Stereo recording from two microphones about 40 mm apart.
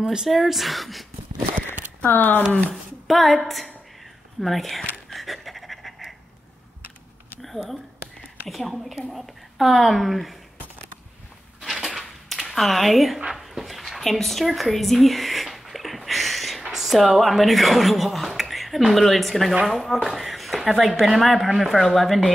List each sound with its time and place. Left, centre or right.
0.0 s speech: centre
0.3 s speech: centre
2.0 s speech: left
2.7 s a woman's voice: centre
5.1 s pant: centre
8.5 s speech: centre
11.6 s a sound: centre
12.4 s speech: centre
13.3 s a sound: centre
16.7 s speech: centre